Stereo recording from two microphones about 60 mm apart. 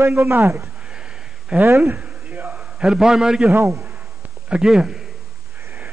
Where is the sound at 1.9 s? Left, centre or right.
Right.